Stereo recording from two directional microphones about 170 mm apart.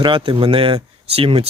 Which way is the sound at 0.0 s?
30° right (ahead or behind).